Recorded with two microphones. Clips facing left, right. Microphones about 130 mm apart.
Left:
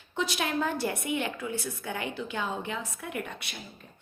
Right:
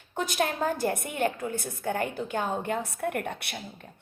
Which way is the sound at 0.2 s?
45° right (ahead or behind).